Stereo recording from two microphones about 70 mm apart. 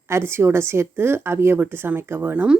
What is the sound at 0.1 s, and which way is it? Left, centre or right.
Speech, right.